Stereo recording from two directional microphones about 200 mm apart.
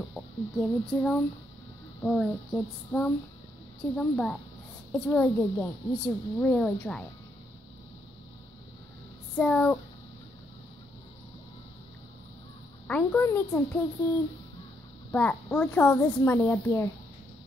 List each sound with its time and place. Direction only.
0.1 s speech: 5° left (ahead or behind)
2.0 s female singing: 5° left (ahead or behind)
4.9 s speech: 10° left (ahead or behind)
9.4 s female singing: 5° left (ahead or behind)
12.8 s speech: 10° left (ahead or behind)
15.0 s speech: 5° left (ahead or behind)